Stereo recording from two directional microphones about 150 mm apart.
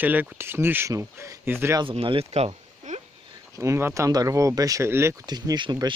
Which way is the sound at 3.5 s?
20° right (ahead or behind).